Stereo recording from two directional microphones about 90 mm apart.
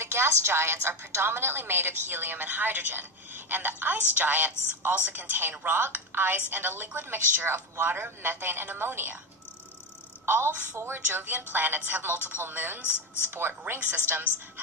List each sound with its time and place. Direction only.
0.0 s a woman's voice: 30° right (ahead or behind)
10.2 s a woman's voice: 25° right (ahead or behind)